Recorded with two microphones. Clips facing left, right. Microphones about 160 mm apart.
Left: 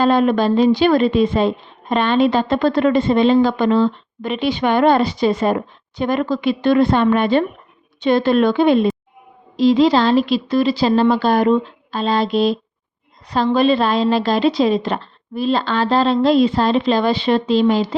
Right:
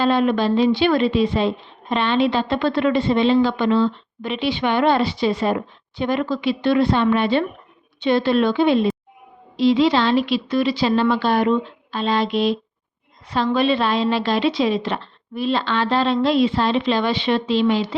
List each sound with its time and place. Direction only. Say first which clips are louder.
0.0 s a woman's voice: left 3 dB; 45° left (ahead or behind)